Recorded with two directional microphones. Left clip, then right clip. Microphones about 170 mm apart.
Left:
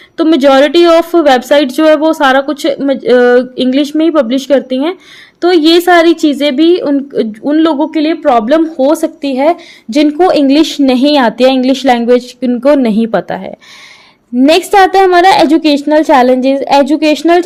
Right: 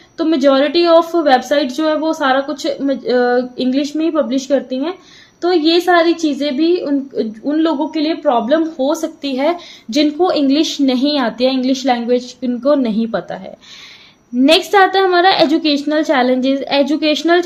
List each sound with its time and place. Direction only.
0.2 s a woman's voice: 55° left (ahead or behind)
14.3 s a woman's voice: 40° left (ahead or behind)